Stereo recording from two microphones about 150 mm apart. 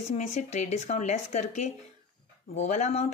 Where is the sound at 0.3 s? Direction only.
50° left (ahead or behind).